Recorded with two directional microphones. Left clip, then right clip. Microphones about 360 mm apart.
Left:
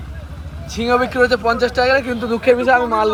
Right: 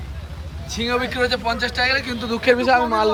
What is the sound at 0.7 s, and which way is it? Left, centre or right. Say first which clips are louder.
Speech: left 6 dB; centre.